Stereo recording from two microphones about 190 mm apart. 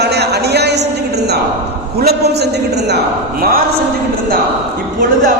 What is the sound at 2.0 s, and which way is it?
A man's voice, 55° right (ahead or behind).